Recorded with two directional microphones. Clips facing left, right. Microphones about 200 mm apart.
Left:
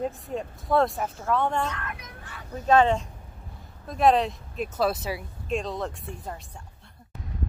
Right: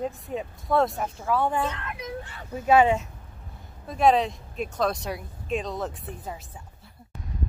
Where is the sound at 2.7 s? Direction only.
10° right (ahead or behind).